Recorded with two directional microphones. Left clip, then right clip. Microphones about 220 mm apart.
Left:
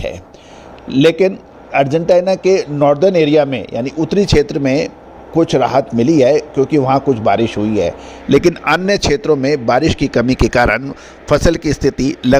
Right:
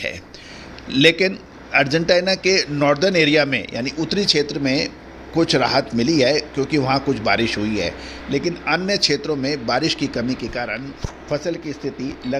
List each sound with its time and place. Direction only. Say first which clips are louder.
0.9 s a man's voice: left 4 dB; 25° left (ahead or behind)
8.3 s a man's voice: left 9 dB; 45° left (ahead or behind)